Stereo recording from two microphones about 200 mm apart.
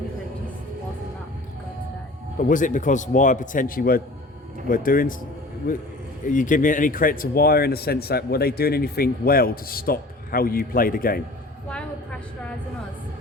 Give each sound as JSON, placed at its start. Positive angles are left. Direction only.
{"t": 2.4, "sound": "a man's voice", "side_deg": 40}